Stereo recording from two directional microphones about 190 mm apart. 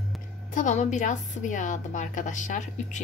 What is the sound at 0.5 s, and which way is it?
A woman's voice, 40° left (ahead or behind).